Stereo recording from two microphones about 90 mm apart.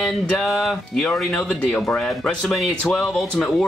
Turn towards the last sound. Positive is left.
turn(degrees=5)  # may be behind; listen again after turning